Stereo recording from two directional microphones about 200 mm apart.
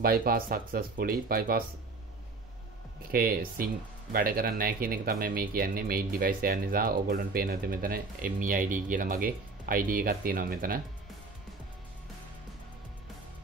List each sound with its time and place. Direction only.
0.0 s speech: 45° right (ahead or behind)
3.1 s speech: 45° right (ahead or behind)